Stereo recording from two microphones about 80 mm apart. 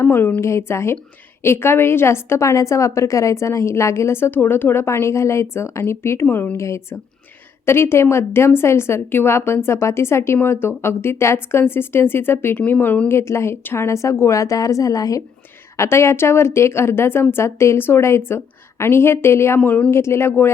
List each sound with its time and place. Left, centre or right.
0.0 s a woman's voice: left
15.8 s a woman's voice: left
19.5 s speech: centre
19.9 s a woman's voice: left